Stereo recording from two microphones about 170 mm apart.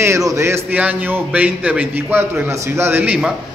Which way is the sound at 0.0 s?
20° right (ahead or behind).